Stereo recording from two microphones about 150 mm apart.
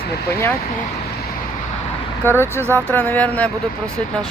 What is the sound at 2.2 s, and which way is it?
Speech, 15° left (ahead or behind).